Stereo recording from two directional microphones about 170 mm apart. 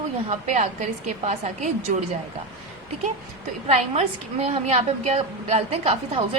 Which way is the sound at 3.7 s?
40° right (ahead or behind).